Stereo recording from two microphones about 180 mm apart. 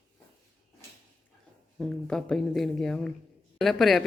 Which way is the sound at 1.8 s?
5° left (ahead or behind).